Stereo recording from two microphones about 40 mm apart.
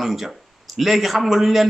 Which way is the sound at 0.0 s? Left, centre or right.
Centre.